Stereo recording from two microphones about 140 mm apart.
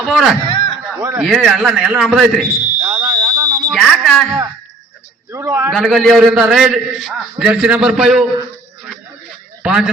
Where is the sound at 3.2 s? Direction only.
30° right (ahead or behind).